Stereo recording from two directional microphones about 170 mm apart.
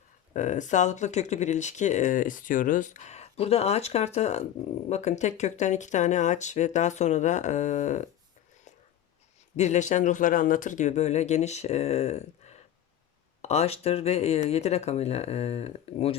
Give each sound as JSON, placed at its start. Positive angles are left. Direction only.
{"t": 0.3, "sound": "speech", "side_deg": 45}
{"t": 9.6, "sound": "speech", "side_deg": 45}